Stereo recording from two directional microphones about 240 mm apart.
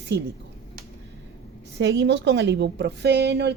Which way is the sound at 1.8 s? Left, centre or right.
Right.